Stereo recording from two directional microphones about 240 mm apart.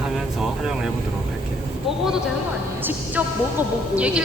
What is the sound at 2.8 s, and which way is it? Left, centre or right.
Music, centre.